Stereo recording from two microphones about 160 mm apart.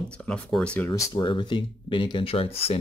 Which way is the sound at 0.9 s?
25° left (ahead or behind).